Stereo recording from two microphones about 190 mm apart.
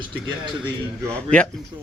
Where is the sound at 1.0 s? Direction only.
5° left (ahead or behind).